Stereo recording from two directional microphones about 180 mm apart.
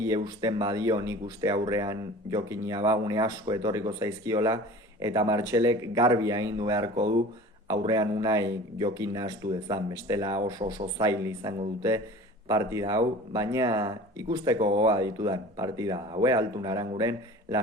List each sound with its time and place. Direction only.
0.0 s a man's voice: 20° right (ahead or behind)